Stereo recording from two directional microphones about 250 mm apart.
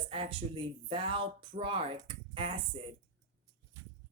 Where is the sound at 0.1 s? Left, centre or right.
Right.